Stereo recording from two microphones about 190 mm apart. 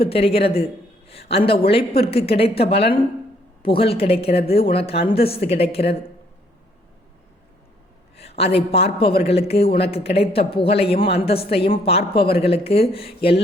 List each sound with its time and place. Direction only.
0.1 s a man's voice: 30° left (ahead or behind)
0.5 s a sound: 30° left (ahead or behind)
1.3 s a man's voice: 30° left (ahead or behind)
8.1 s a man's voice: 30° left (ahead or behind)